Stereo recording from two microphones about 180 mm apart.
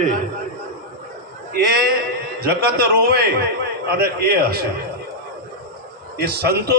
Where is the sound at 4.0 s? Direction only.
60° right (ahead or behind).